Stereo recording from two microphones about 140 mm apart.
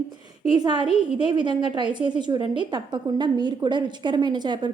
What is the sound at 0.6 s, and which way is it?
A woman's voice, 35° right (ahead or behind).